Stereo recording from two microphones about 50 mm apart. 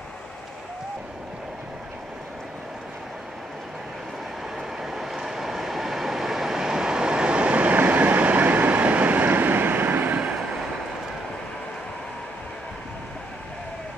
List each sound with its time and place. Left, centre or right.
4.6 s vehicle: centre; by 10.2 s right